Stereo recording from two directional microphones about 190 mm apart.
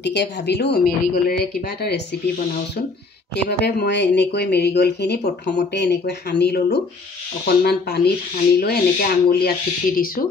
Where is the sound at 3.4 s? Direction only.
60° left (ahead or behind).